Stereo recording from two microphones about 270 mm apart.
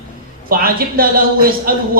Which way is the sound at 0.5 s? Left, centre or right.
Right.